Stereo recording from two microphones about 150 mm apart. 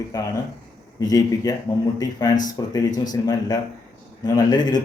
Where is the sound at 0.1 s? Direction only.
25° left (ahead or behind).